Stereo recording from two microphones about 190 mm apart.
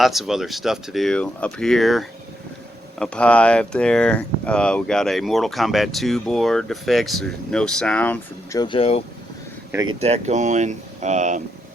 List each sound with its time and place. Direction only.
0.0 s speech: centre (ahead or behind)
8.5 s speech: 25° left (ahead or behind)
9.9 s speech: 35° right (ahead or behind)